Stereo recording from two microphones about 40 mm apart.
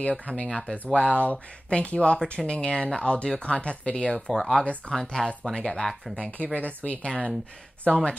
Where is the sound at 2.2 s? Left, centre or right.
Centre.